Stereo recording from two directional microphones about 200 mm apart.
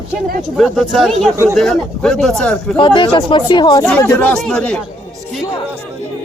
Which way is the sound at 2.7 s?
25° left (ahead or behind).